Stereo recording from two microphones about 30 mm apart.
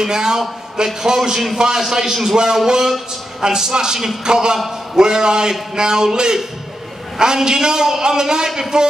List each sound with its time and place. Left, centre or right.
0.0 s a man's voice: right